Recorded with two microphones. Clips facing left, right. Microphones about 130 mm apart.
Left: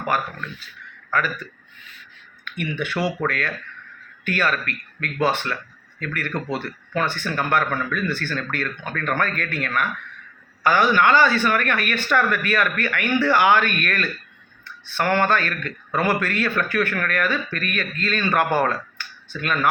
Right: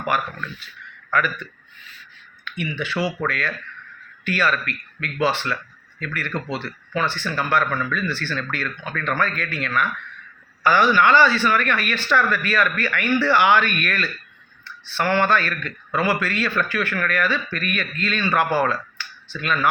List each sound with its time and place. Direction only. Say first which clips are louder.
1.1 s a man's voice: right 1 dB; 35° left (ahead or behind)
2.4 s a man's voice: left 1 dB; 50° left (ahead or behind)